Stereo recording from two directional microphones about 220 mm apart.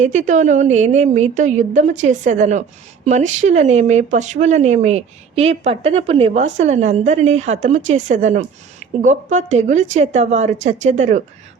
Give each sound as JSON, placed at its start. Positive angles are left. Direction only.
{"t": 0.0, "sound": "speech", "side_deg": -30}